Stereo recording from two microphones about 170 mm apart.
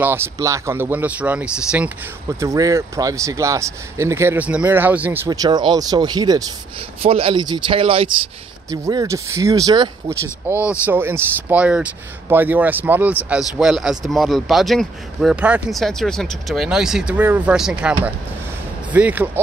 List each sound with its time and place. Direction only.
0.0 s speech: 15° right (ahead or behind)
2.4 s speech: 20° right (ahead or behind)
7.0 s speech: 35° right (ahead or behind)
8.6 s speech: 20° right (ahead or behind)
10.7 s speech: 10° right (ahead or behind)